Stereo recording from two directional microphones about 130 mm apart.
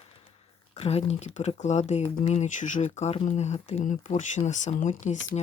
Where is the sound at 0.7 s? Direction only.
50° left (ahead or behind).